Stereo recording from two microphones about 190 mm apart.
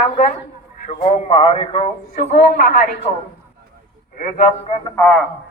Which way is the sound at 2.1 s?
50° left (ahead or behind).